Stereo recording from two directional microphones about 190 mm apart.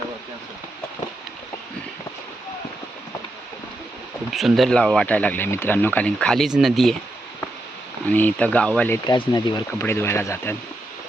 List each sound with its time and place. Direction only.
4.3 s speech: centre (ahead or behind)
8.0 s speech: 10° left (ahead or behind)
9.0 s speech: 20° left (ahead or behind)